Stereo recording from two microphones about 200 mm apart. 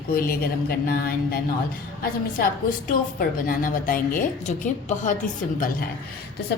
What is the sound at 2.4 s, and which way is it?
A woman's voice, 45° left (ahead or behind).